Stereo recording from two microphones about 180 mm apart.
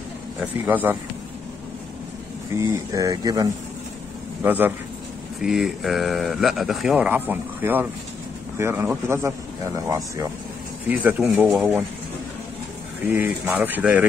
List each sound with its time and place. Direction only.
0.4 s speech: 10° right (ahead or behind)
2.5 s speech: 15° right (ahead or behind); by 11.7 s centre (ahead or behind)
13.0 s speech: 10° right (ahead or behind)